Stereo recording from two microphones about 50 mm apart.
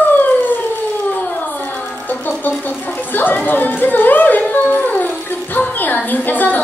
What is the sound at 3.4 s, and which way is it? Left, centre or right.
Speech, left.